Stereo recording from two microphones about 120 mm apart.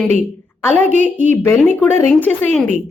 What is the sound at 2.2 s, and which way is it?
Speech, 15° left (ahead or behind).